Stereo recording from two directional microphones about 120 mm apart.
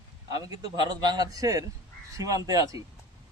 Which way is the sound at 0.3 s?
35° right (ahead or behind).